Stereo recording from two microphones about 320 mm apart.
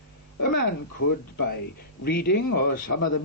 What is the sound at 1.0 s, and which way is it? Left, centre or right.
A man's voice, left.